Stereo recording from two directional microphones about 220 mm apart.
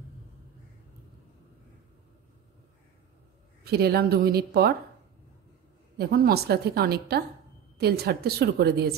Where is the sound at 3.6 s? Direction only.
45° right (ahead or behind).